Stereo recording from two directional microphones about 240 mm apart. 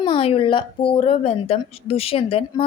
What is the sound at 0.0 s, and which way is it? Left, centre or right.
A woman's voice, left.